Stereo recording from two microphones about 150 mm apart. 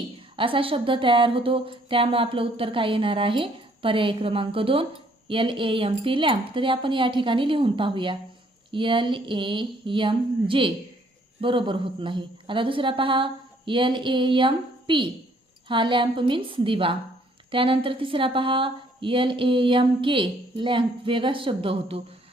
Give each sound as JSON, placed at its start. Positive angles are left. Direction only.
{"t": 0.3, "sound": "speech", "side_deg": -35}